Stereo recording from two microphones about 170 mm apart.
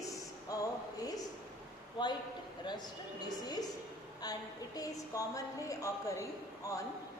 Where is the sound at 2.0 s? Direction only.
25° left (ahead or behind).